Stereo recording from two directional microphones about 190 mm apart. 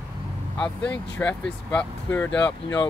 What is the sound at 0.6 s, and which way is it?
Speech, 5° left (ahead or behind).